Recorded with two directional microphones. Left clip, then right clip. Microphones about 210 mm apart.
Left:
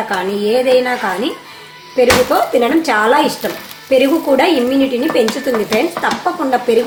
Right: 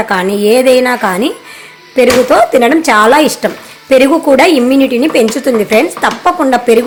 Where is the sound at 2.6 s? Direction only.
50° right (ahead or behind).